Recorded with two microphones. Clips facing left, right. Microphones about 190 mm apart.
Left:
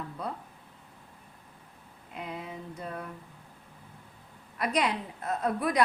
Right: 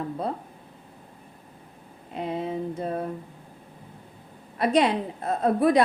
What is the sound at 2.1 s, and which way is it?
Speech, 30° right (ahead or behind).